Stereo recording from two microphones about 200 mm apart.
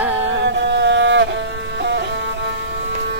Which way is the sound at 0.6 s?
60° right (ahead or behind).